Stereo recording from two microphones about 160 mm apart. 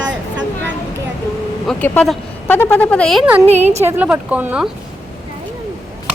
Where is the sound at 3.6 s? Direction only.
45° right (ahead or behind).